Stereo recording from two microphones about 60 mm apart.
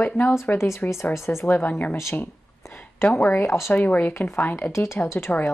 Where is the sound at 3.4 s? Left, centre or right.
Left.